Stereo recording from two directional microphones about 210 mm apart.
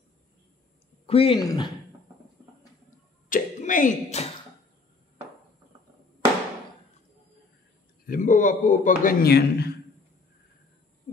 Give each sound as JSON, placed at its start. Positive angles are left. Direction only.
{"t": 1.0, "sound": "speech", "side_deg": 25}
{"t": 3.3, "sound": "a sound", "side_deg": 40}
{"t": 8.1, "sound": "a man's voice", "side_deg": 40}